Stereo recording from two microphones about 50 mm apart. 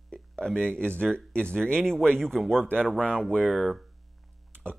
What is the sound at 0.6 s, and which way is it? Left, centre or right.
Speech, left.